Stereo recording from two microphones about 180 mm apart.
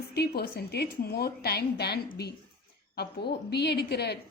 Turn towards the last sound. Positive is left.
turn(degrees=65)  # may be behind; listen again after turning